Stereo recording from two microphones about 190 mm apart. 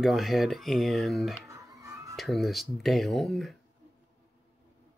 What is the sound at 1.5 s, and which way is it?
Music, 20° right (ahead or behind).